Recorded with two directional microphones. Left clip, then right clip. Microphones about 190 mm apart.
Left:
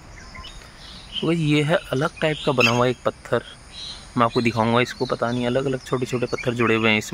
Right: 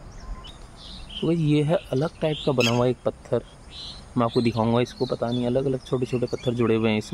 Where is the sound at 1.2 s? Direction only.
Centre (ahead or behind).